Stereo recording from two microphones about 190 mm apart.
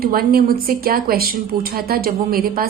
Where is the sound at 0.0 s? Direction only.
50° right (ahead or behind).